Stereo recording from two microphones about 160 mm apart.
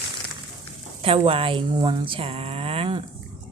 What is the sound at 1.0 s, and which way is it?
Speech, 35° right (ahead or behind).